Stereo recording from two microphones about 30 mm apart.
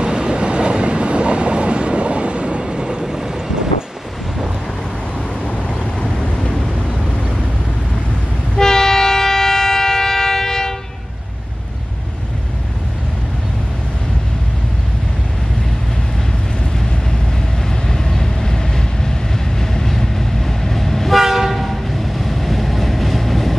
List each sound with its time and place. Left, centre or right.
0.0 s train: right
3.0 s train: centre
5.6 s vehicle: left
8.5 s train: centre
17.6 s vehicle: left
18.1 s train: centre
21.1 s train: centre